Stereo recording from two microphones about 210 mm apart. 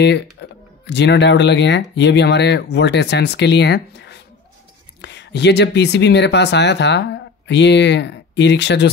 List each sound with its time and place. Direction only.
0.0 s speech: 55° left (ahead or behind)